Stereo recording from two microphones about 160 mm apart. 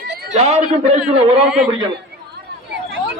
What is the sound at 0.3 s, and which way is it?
Speech, 45° right (ahead or behind).